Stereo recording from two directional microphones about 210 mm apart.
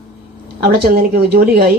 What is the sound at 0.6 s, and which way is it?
Speech, 50° right (ahead or behind).